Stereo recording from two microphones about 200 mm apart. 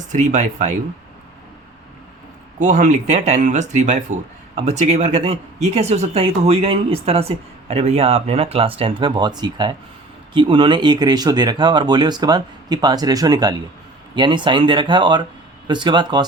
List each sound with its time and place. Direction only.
0.1 s speech: 40° right (ahead or behind)
2.6 s speech: 40° right (ahead or behind); by 16.2 s 25° right (ahead or behind)